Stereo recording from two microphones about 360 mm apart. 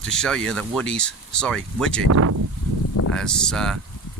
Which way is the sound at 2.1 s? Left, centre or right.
Right.